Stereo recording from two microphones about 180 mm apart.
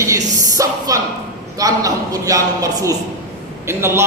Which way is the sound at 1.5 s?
20° right (ahead or behind).